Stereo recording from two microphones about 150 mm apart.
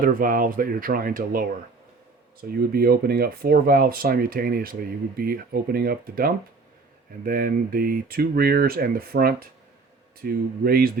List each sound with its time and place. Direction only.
0.0 s speech: 70° right (ahead or behind)
2.4 s speech: 90° right